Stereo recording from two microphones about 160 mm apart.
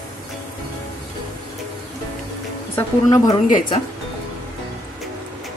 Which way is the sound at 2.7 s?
20° left (ahead or behind).